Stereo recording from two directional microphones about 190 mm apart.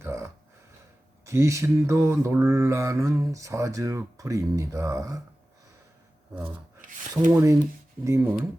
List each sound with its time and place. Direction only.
0.0 s a sound: 15° right (ahead or behind)
1.2 s mantra: 15° right (ahead or behind)
6.8 s rub: 45° right (ahead or behind)
7.3 s mantra: 15° right (ahead or behind)